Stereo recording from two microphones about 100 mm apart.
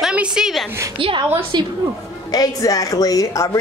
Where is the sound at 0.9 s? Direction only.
60° right (ahead or behind).